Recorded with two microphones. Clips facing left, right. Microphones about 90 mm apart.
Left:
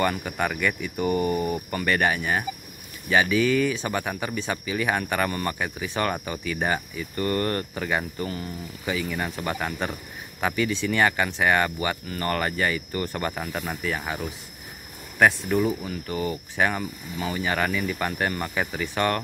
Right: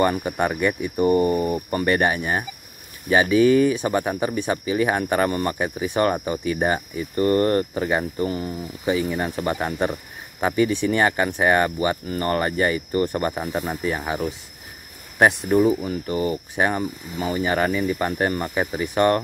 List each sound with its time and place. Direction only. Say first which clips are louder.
0.0 s speech: right 4 dB; 25° right (ahead or behind)
3.7 s speech: right 6 dB; 20° right (ahead or behind); by 9.3 s 35° right (ahead or behind)
9.4 s speech: right 7 dB; 25° right (ahead or behind)
15.5 s speech: right 6 dB; 35° right (ahead or behind)
16.5 s speech: right 2 dB; 20° right (ahead or behind)
16.8 s speech: right 4 dB; 40° right (ahead or behind)
18.2 s speech: right 3 dB; 30° right (ahead or behind)